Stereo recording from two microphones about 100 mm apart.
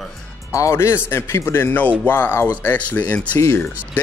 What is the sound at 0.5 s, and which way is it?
Speech, 30° left (ahead or behind).